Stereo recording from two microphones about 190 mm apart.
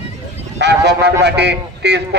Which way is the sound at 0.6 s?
60° right (ahead or behind).